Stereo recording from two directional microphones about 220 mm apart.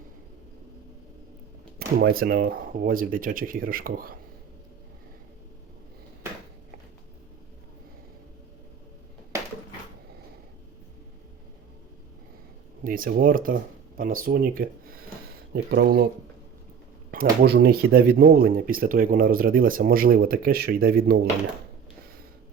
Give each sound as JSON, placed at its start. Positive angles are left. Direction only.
{"t": 2.0, "sound": "speech", "side_deg": -40}
{"t": 12.8, "sound": "speech", "side_deg": -40}
{"t": 15.7, "sound": "speech", "side_deg": -50}
{"t": 17.4, "sound": "speech", "side_deg": -45}